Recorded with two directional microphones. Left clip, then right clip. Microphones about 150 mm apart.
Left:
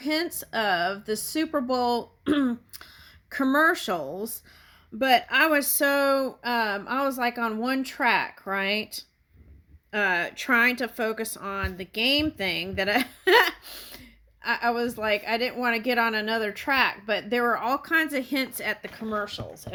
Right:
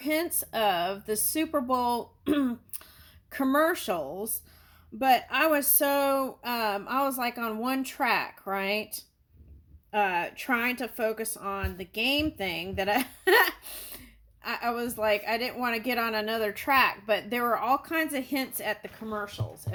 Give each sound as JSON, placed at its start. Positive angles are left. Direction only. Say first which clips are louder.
{"t": 0.0, "sound": "speech", "louder": "left 1 dB", "side_deg": 20}
{"t": 2.2, "sound": "throat clearing", "louder": "left 2 dB", "side_deg": 25}
{"t": 3.2, "sound": "speech", "louder": "left 3 dB", "side_deg": 25}